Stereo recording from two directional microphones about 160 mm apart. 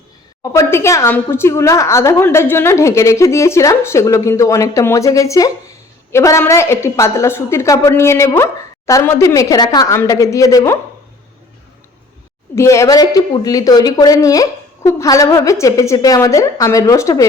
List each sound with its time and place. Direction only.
0.5 s a woman's voice: 15° left (ahead or behind)
12.5 s a woman's voice: 20° left (ahead or behind)